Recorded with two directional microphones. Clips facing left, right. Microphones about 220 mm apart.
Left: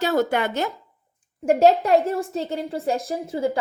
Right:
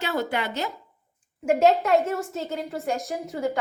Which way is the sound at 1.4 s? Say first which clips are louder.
Left 3 dB; 35° left (ahead or behind).